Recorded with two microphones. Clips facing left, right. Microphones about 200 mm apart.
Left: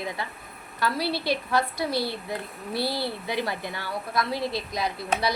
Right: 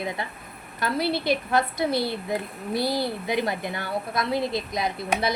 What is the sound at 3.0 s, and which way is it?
Speech, 20° right (ahead or behind).